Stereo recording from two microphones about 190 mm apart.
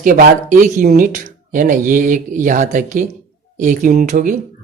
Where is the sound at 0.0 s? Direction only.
45° right (ahead or behind).